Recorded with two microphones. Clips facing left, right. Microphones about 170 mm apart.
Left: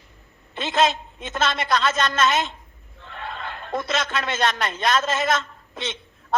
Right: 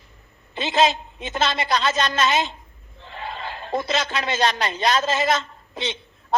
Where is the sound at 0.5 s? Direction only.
30° right (ahead or behind).